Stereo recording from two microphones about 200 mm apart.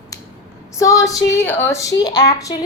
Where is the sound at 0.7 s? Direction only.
15° left (ahead or behind).